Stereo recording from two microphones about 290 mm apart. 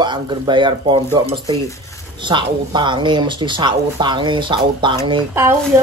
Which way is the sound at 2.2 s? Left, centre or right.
Centre.